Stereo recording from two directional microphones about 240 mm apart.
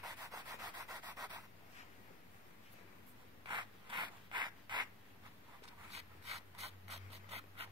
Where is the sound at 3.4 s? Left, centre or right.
Centre.